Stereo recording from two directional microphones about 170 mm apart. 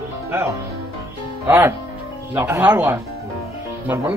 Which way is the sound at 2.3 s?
15° right (ahead or behind).